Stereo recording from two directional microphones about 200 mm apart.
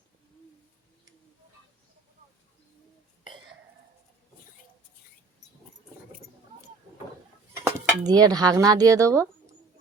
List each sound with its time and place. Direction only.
7.6 s speech: 20° right (ahead or behind)